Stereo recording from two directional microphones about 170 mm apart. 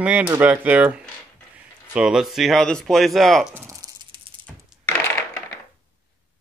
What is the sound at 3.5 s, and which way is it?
Speech, 10° right (ahead or behind).